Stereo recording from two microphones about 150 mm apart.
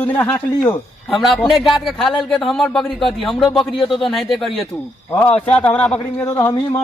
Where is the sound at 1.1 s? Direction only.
Centre (ahead or behind).